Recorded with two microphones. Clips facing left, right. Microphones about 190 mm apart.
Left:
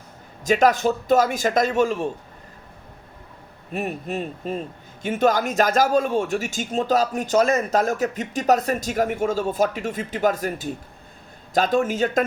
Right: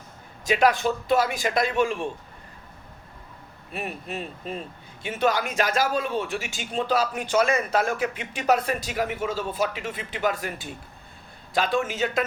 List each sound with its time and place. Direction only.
0.4 s speech: 45° left (ahead or behind)
3.7 s speech: 45° left (ahead or behind)